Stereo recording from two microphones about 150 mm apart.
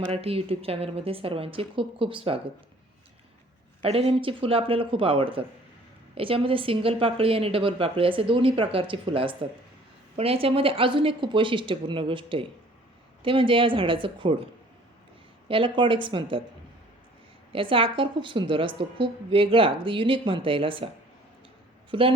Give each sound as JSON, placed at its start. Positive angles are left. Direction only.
{"t": 0.1, "sound": "a woman's voice", "side_deg": -40}
{"t": 3.8, "sound": "a woman's voice", "side_deg": -40}
{"t": 15.4, "sound": "a woman's voice", "side_deg": -35}
{"t": 17.5, "sound": "a woman's voice", "side_deg": -35}